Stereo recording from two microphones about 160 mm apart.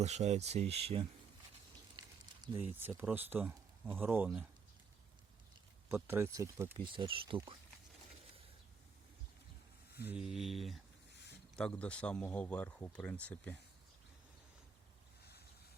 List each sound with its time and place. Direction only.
0.0 s speech: 45° right (ahead or behind)
2.6 s speech: 10° right (ahead or behind)
5.9 s speech: 15° right (ahead or behind)
6.8 s speech: 35° right (ahead or behind)
10.1 s mantra: 5° right (ahead or behind)
11.1 s a sound: 90° left
11.5 s speech: 5° left (ahead or behind)